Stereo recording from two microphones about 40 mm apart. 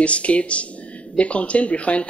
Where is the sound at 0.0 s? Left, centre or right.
Left.